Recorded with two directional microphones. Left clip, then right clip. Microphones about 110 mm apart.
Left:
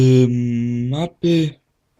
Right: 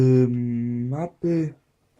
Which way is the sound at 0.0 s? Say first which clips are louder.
Left 4 dB; 40° left (ahead or behind).